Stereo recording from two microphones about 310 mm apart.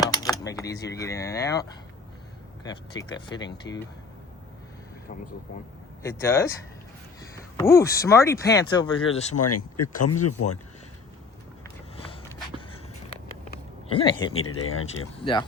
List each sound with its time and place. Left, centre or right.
0.1 s speech: centre
2.6 s speech: centre
6.0 s speech: centre
7.5 s speech: centre
9.3 s speech: left
13.4 s a sound: left
14.3 s speech: left
14.9 s speech: centre